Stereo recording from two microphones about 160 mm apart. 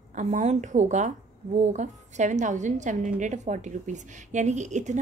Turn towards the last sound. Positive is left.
turn(degrees=-50)  # may be behind; listen again after turning